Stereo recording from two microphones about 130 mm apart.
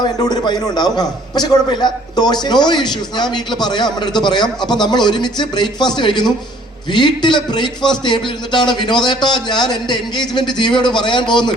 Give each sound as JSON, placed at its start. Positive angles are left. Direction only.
{"t": 0.0, "sound": "a man's voice", "side_deg": 35}